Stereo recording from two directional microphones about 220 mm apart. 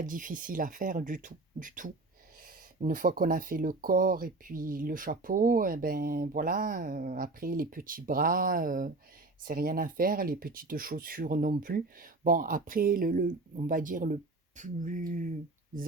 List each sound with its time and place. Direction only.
0.0 s speech: 35° right (ahead or behind)